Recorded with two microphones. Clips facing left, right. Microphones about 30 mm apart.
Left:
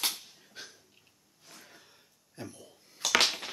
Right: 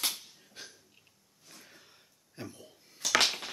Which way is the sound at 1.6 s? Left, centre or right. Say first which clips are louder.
Left 1 dB; centre.